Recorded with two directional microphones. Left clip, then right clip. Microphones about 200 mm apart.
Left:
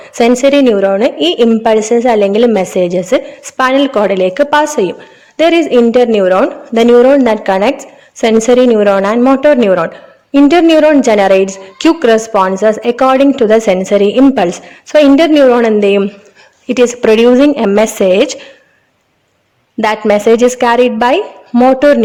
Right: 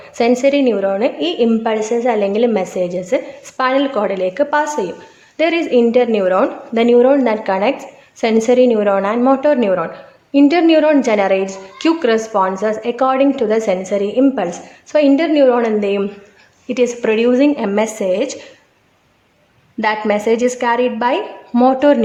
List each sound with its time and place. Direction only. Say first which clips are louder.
0.0 s a woman's voice: left 5 dB; 40° left (ahead or behind)
19.8 s a woman's voice: left 6 dB; 40° left (ahead or behind)